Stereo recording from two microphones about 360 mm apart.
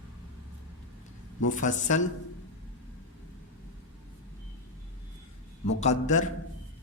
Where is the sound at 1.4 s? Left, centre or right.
Left.